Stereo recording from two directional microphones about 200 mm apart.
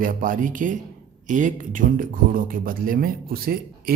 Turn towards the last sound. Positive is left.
turn(degrees=-50)  # may be behind; listen again after turning